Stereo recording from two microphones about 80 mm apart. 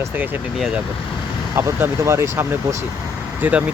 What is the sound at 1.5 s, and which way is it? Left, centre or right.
Speech, right.